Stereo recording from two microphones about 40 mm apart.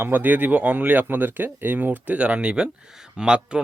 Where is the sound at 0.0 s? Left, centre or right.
Right.